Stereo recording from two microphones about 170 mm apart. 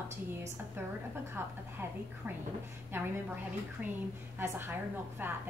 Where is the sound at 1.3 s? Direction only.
15° right (ahead or behind).